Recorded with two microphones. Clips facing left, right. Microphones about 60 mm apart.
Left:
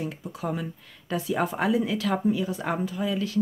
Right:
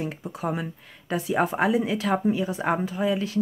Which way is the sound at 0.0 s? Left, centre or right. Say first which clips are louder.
Right 2 dB; right.